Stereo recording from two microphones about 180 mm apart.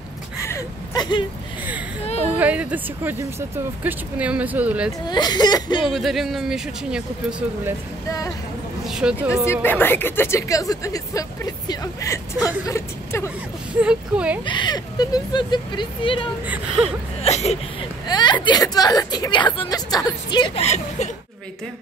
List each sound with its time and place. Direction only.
0.5 s whimper: 25° left (ahead or behind)
2.2 s speech: 10° right (ahead or behind)
5.0 s a woman's voice: 25° left (ahead or behind)
5.9 s speech: centre (ahead or behind)
8.8 s speech: 5° right (ahead or behind)
9.5 s speech: 10° left (ahead or behind)
13.7 s speech: 5° right (ahead or behind)
14.4 s a woman's voice: 25° left (ahead or behind)
16.4 s speech: 5° right (ahead or behind)
17.2 s speech: 35° left (ahead or behind)
18.0 s a woman's voice: 25° left (ahead or behind)
20.6 s speech: 40° left (ahead or behind)